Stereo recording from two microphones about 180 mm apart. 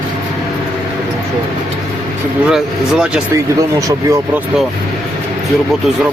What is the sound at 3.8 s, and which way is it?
Speech, 20° right (ahead or behind).